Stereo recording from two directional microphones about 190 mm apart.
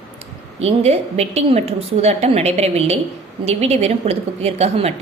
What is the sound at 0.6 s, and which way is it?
A woman's voice, 35° right (ahead or behind).